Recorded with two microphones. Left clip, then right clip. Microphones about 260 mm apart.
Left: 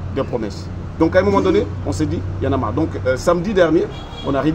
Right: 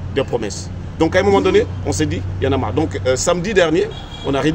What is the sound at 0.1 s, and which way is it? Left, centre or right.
Speech, right.